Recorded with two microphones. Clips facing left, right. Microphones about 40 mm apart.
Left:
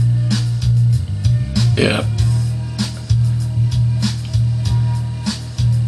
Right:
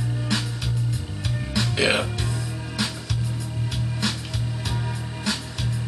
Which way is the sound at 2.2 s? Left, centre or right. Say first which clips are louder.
Left 7 dB; centre.